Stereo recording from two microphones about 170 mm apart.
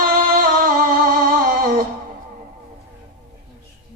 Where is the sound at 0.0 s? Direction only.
55° right (ahead or behind).